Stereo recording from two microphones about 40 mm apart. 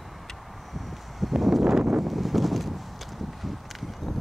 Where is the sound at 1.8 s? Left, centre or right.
Centre.